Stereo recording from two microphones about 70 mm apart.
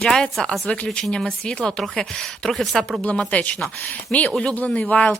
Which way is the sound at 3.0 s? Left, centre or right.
Centre.